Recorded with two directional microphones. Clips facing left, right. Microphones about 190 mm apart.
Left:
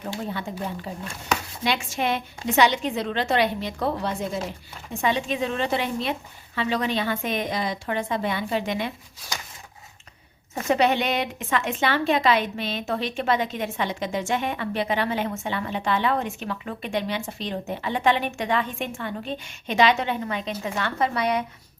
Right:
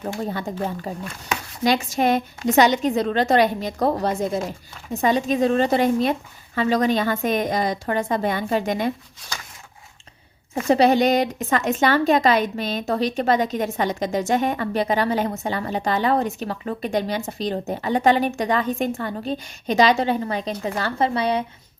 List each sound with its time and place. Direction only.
0.0 s a woman's voice: 40° right (ahead or behind)
10.5 s speech: 35° right (ahead or behind)